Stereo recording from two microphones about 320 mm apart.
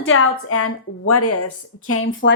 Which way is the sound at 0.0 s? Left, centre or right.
Left.